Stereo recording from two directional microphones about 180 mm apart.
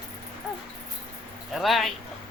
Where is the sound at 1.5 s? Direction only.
Centre (ahead or behind).